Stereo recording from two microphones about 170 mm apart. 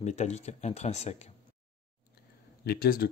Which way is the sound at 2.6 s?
60° left (ahead or behind).